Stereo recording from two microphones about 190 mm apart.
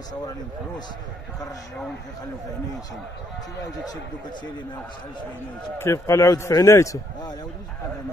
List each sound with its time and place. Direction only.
5.8 s a man's voice: 15° left (ahead or behind)